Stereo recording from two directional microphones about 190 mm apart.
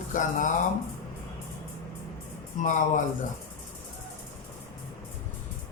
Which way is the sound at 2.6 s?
40° left (ahead or behind).